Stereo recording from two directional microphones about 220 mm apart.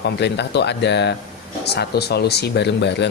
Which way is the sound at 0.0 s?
50° left (ahead or behind).